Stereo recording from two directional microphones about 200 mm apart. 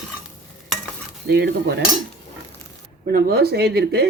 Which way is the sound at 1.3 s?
55° right (ahead or behind).